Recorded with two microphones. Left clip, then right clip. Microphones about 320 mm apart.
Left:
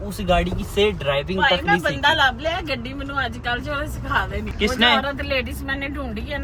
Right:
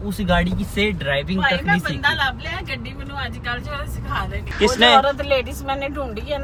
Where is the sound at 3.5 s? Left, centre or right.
Left.